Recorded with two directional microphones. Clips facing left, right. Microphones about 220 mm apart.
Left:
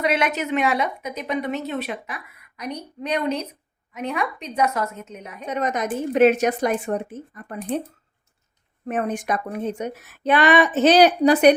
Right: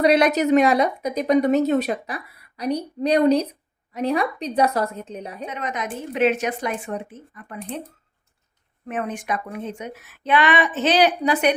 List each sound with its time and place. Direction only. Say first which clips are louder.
0.0 s a woman's voice: right 6 dB; 35° right (ahead or behind)
5.5 s a woman's voice: left 7 dB; 40° left (ahead or behind)
8.9 s speech: left 3 dB; 40° left (ahead or behind)